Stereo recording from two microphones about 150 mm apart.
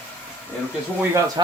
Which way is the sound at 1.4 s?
30° right (ahead or behind).